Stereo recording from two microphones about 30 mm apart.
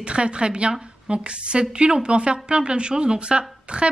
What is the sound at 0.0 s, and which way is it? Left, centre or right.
Speech, right.